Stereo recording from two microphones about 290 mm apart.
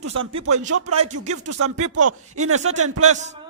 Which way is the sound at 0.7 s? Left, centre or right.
Right.